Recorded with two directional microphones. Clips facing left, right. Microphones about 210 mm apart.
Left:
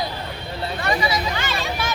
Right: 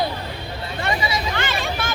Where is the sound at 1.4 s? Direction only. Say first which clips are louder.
Right 1 dB; 55° right (ahead or behind).